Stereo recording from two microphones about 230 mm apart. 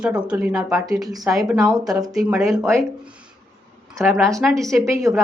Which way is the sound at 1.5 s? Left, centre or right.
Centre.